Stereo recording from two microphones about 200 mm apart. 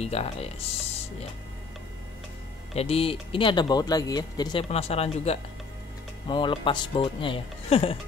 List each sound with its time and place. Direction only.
0.0 s speech: 30° left (ahead or behind)
2.7 s speech: 30° left (ahead or behind)